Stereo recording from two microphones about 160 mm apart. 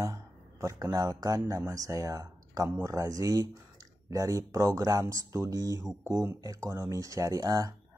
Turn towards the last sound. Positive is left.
turn(degrees=-20)  # may be behind; listen again after turning